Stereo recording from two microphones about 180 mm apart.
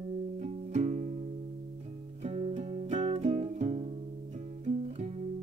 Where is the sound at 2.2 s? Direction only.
35° right (ahead or behind).